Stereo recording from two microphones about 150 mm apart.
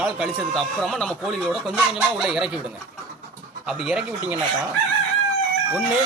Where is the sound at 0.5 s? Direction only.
5° left (ahead or behind).